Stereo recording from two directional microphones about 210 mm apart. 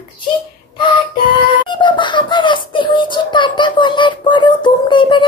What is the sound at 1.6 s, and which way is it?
Speech, 20° left (ahead or behind).